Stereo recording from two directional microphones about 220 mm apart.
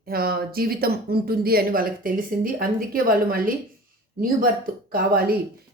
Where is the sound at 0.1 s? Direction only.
45° right (ahead or behind).